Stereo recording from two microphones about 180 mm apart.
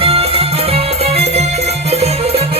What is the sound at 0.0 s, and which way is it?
Music, 35° right (ahead or behind).